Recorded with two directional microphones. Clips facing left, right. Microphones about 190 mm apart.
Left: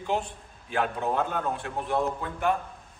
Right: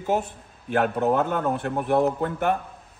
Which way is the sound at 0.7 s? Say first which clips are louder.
Right 6 dB; 60° right (ahead or behind).